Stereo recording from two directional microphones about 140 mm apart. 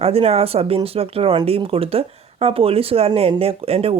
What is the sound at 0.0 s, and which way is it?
Speech, 45° right (ahead or behind).